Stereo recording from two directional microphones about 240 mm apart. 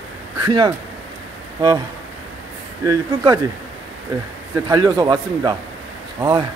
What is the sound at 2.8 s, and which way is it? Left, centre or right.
Speech, centre.